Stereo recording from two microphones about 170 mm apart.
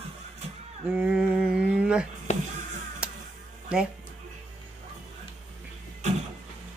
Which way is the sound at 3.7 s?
5° right (ahead or behind).